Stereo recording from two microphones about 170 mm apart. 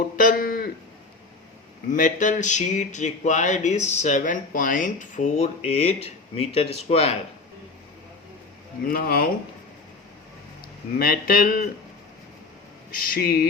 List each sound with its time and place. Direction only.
0.2 s a sound: 55° left (ahead or behind)
1.9 s speech: 50° left (ahead or behind)
8.9 s speech: 60° left (ahead or behind)
10.9 s speech: 60° left (ahead or behind)
12.9 s speech: 60° left (ahead or behind)